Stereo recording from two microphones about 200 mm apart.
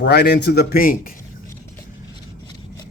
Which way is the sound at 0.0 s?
55° left (ahead or behind).